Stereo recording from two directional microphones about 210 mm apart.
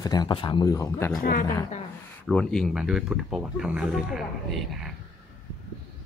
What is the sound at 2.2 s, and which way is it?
Speech, 5° left (ahead or behind).